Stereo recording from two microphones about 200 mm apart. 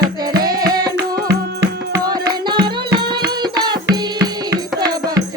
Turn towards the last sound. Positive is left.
turn(degrees=-20)  # may be behind; listen again after turning